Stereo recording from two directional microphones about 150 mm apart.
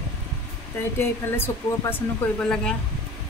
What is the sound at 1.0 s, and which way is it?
A woman's voice, 15° left (ahead or behind).